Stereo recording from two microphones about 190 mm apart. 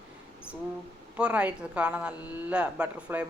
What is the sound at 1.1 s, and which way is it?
A woman's voice, 5° right (ahead or behind).